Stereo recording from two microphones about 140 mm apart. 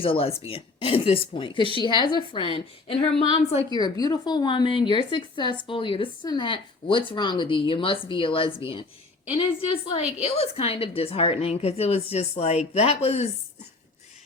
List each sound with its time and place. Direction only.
0.0 s speech: 40° left (ahead or behind)
3.7 s speech: 30° left (ahead or behind)
9.8 s a woman's voice: 45° left (ahead or behind)